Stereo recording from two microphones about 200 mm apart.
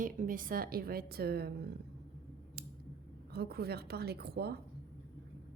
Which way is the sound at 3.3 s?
55° right (ahead or behind).